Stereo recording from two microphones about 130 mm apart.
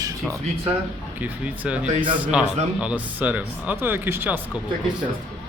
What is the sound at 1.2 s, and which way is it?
Speech, 10° right (ahead or behind).